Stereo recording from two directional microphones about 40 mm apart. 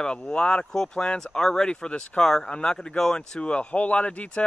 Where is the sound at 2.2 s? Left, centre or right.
Centre.